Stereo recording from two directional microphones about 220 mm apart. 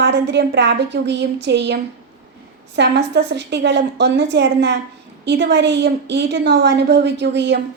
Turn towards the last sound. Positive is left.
turn(degrees=-50)  # may be behind; listen again after turning